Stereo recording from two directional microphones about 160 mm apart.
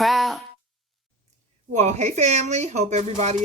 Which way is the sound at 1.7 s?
45° right (ahead or behind).